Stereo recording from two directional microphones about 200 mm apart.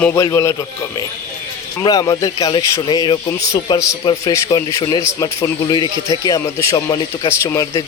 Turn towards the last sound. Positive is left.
turn(degrees=15)  # may be behind; listen again after turning